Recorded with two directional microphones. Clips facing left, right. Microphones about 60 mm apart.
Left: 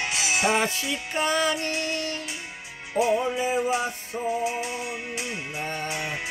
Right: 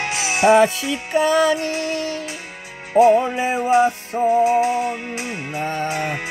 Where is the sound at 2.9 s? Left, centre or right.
Right.